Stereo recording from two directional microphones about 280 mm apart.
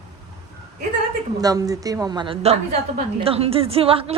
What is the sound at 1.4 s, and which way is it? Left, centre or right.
A woman's voice, centre.